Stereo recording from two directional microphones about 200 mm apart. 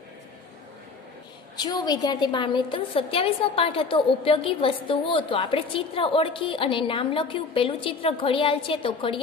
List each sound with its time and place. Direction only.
1.6 s a woman's voice: 20° left (ahead or behind)